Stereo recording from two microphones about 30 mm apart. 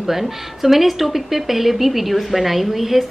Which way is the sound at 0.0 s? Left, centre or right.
Centre.